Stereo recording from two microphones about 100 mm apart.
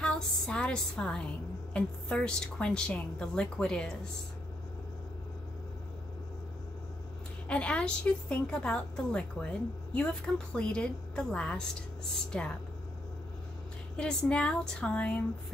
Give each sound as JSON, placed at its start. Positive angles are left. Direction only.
{"t": 0.0, "sound": "a woman's voice", "side_deg": 10}
{"t": 7.4, "sound": "a woman's voice", "side_deg": 10}
{"t": 13.9, "sound": "a woman's voice", "side_deg": 10}